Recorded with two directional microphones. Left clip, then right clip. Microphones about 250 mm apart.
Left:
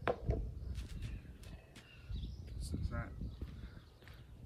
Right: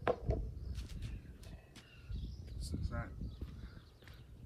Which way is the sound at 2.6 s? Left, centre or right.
Centre.